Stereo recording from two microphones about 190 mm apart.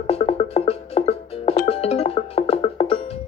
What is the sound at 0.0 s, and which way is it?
Music, 30° left (ahead or behind).